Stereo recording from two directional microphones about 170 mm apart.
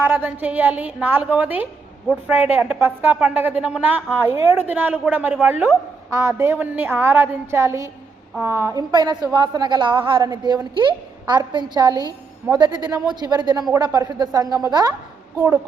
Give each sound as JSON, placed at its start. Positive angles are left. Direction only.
{"t": 0.0, "sound": "a woman's voice", "side_deg": -10}